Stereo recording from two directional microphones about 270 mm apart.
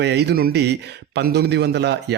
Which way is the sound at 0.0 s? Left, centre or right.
Right.